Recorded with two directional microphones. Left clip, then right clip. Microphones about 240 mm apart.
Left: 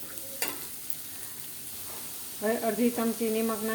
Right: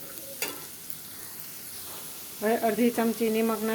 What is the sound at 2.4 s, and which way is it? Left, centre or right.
Frying, centre.